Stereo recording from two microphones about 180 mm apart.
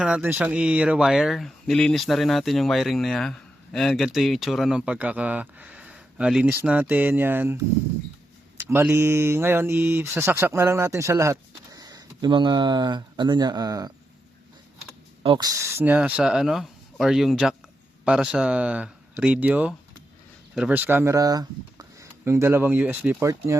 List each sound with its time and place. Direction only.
0.0 s speech: 10° right (ahead or behind)
15.2 s speech: 25° right (ahead or behind)